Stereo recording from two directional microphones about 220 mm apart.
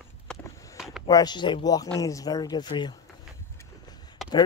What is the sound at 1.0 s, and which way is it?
Speech, 20° left (ahead or behind).